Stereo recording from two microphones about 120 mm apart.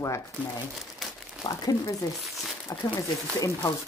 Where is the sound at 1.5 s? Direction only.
30° left (ahead or behind).